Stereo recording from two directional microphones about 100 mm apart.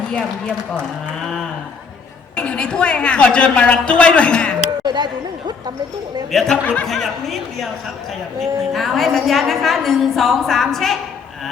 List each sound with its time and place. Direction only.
2.3 s a woman's voice: 10° left (ahead or behind)
4.8 s a sound: 45° right (ahead or behind)
6.3 s a woman's voice: 5° left (ahead or behind)